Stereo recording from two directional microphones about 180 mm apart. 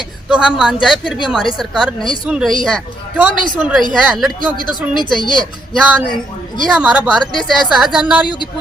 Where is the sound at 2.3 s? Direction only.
5° right (ahead or behind).